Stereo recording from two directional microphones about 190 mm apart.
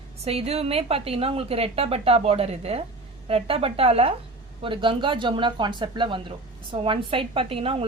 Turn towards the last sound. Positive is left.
turn(degrees=-30)  # may be behind; listen again after turning